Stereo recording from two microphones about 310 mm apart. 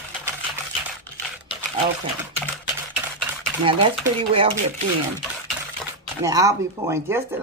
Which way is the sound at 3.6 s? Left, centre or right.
Centre.